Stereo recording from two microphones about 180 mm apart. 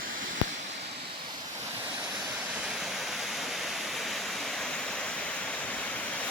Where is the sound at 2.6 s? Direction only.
Centre (ahead or behind).